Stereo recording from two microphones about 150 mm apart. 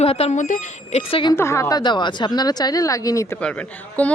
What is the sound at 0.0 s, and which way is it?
Speech, 40° left (ahead or behind).